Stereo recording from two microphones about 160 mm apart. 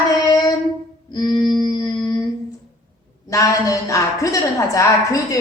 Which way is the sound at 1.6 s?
25° left (ahead or behind).